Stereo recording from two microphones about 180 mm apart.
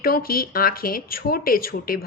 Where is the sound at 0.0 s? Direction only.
55° left (ahead or behind).